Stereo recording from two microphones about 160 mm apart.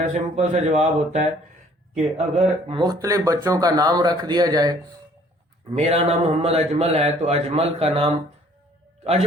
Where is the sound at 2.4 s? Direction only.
35° right (ahead or behind).